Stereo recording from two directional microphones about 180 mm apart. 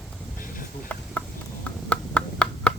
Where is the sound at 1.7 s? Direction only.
5° left (ahead or behind).